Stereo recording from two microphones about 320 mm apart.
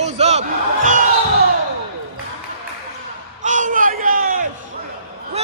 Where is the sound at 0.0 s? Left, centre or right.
Right.